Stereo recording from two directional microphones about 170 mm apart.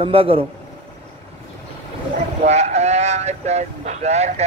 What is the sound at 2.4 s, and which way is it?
Speech, 40° right (ahead or behind).